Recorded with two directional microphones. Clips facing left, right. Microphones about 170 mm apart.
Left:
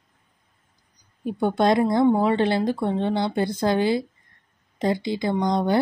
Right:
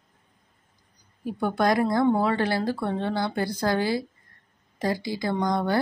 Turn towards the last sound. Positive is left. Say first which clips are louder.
# left 3 dB
turn(degrees=20)  # may be behind; listen again after turning